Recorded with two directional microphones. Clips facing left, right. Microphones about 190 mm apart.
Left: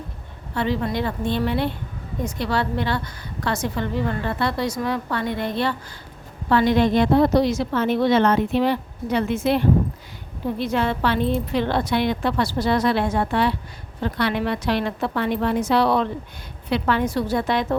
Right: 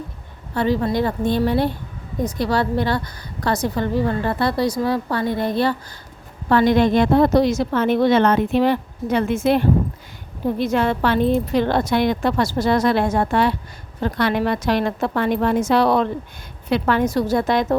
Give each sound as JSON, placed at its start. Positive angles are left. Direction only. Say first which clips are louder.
{"t": 0.5, "sound": "a woman's voice", "louder": "right 4 dB", "side_deg": -40}